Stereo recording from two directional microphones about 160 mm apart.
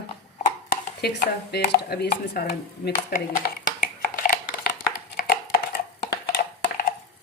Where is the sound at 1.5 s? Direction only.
90° left; by 3.5 s 60° left (ahead or behind).